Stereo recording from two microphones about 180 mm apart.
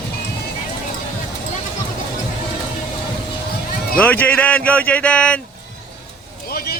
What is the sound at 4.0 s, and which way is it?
Speech, 10° left (ahead or behind).